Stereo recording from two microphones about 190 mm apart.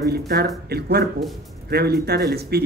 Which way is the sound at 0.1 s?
55° right (ahead or behind).